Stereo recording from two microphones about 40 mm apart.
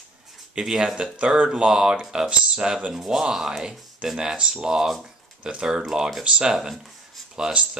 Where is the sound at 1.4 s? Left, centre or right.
Right.